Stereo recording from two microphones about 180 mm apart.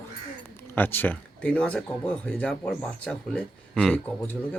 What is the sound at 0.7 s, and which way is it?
Speech, 10° left (ahead or behind).